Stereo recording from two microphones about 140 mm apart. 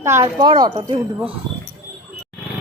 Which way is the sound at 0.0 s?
20° right (ahead or behind).